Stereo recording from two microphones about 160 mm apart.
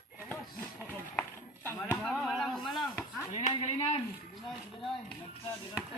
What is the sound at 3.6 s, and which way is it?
Speech, 40° left (ahead or behind).